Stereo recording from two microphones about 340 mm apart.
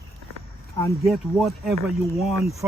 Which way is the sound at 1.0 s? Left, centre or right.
Centre.